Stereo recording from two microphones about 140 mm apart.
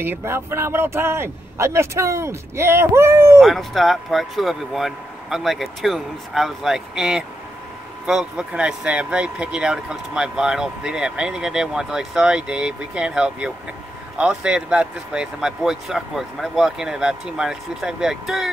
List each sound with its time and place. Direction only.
0.0 s speech: 15° right (ahead or behind)
3.3 s speech: centre (ahead or behind)